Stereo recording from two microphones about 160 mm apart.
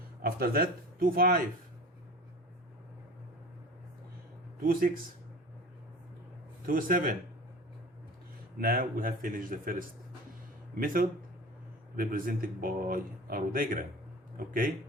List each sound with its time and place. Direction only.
0.2 s speech: 70° right (ahead or behind)
4.6 s a man's voice: 65° right (ahead or behind)
6.7 s a man's voice: 60° right (ahead or behind)
8.5 s a man's voice: 65° right (ahead or behind)